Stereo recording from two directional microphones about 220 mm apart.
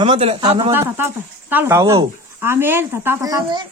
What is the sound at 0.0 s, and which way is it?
Speech, 25° right (ahead or behind).